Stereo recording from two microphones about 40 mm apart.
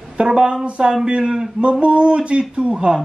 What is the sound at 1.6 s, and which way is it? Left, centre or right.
Speech, right.